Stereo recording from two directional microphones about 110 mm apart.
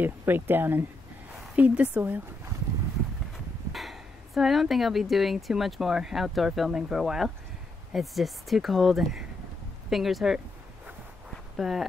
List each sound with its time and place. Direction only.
0.0 s speech: 20° right (ahead or behind)
3.7 s speech: centre (ahead or behind)
11.5 s speech: centre (ahead or behind)